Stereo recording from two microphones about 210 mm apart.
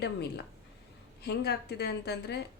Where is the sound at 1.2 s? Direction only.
50° left (ahead or behind).